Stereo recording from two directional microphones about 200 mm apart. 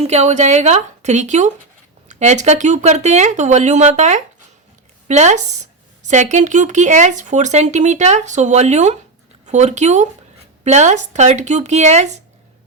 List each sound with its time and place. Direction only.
0.0 s speech: 35° right (ahead or behind)